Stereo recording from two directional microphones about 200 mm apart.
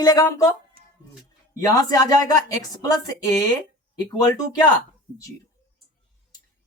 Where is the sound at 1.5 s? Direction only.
20° left (ahead or behind).